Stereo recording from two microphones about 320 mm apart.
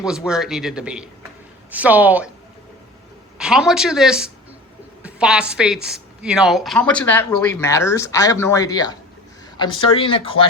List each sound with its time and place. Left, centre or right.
0.0 s a woman's voice: centre
3.3 s a woman's voice: centre